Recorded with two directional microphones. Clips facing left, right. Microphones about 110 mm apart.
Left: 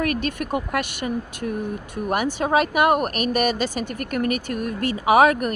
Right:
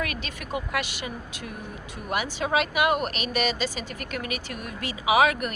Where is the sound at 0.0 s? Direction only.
50° left (ahead or behind).